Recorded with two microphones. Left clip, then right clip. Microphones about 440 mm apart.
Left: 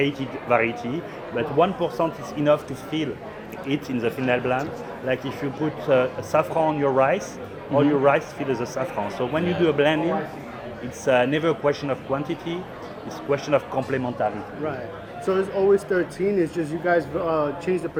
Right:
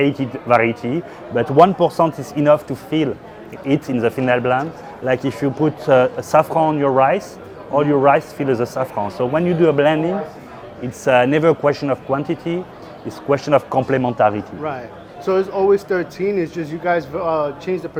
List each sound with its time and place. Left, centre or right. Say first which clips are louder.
0.0 s speech: right 6 dB; right
11.0 s speech: right 6 dB; right